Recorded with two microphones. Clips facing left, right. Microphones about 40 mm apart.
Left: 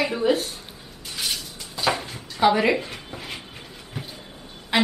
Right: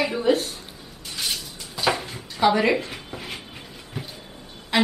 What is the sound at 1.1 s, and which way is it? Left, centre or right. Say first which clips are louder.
Dishes: even; centre.